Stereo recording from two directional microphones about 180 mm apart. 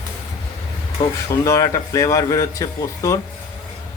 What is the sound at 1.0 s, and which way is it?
Speech, 20° left (ahead or behind).